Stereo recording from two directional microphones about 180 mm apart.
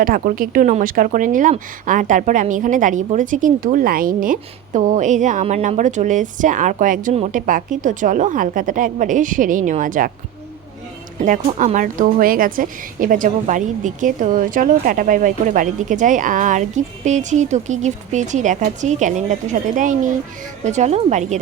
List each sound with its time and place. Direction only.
0.0 s speech: 50° right (ahead or behind)
11.2 s speech: 40° right (ahead or behind)